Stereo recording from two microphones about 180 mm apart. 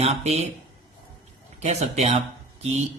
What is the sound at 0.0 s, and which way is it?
Speech, 35° right (ahead or behind).